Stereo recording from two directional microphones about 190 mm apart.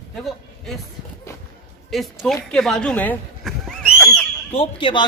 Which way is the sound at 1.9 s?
Centre (ahead or behind).